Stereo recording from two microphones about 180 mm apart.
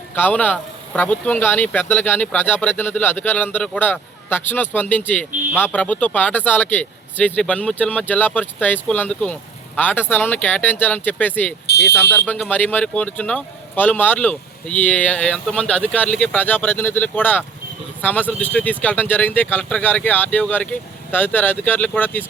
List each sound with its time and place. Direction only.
0.2 s speech: 10° left (ahead or behind)
11.6 s speech: 70° left (ahead or behind)
11.9 s speech: 10° left (ahead or behind)